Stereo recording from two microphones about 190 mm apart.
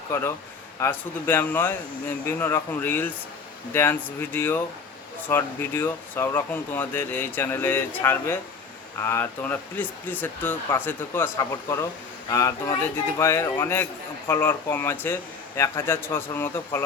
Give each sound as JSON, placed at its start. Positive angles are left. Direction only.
{"t": 0.1, "sound": "speech", "side_deg": 15}